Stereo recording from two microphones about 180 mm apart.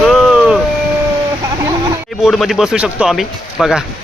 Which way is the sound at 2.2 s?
Centre (ahead or behind).